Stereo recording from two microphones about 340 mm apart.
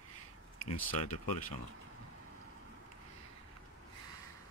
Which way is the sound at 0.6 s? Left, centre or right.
Left.